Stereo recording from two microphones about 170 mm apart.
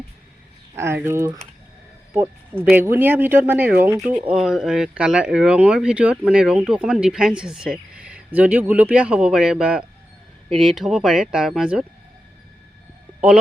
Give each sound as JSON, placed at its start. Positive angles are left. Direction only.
{"t": 0.8, "sound": "speech", "side_deg": -15}